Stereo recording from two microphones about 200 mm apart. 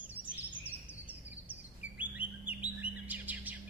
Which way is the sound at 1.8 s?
5° right (ahead or behind).